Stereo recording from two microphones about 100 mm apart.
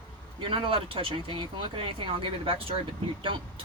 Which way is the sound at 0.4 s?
60° right (ahead or behind).